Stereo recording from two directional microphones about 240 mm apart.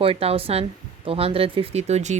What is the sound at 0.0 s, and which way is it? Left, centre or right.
Speech, right.